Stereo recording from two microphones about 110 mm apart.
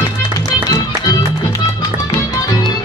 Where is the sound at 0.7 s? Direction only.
35° left (ahead or behind).